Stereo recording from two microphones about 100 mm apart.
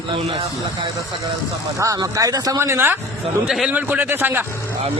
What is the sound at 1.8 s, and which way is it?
Speech, 35° right (ahead or behind).